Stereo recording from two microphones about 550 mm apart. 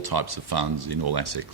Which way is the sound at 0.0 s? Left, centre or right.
Right.